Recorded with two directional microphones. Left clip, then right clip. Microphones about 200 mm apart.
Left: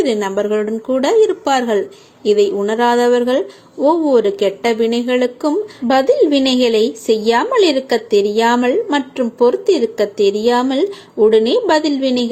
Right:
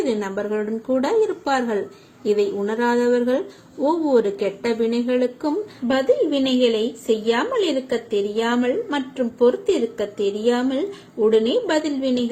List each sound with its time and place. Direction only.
0.0 s speech: 5° left (ahead or behind)
5.9 s speech: 15° left (ahead or behind)